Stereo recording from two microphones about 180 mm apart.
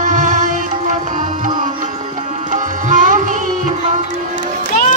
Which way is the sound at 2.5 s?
45° right (ahead or behind).